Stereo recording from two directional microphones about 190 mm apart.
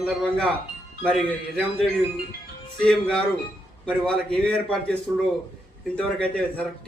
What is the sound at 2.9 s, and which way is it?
A man's voice, 5° left (ahead or behind).